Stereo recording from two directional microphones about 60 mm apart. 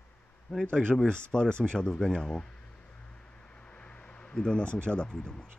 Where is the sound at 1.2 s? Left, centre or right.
Centre.